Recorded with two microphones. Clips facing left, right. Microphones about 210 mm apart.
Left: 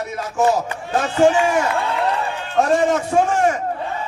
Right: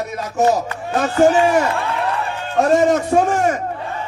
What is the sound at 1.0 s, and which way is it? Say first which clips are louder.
Speech: right 2 dB; 40° right (ahead or behind).